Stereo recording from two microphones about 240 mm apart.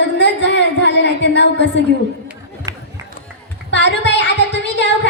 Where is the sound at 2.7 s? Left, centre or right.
Centre.